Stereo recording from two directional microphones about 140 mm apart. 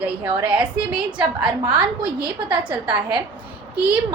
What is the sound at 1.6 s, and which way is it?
A woman's voice, 35° right (ahead or behind).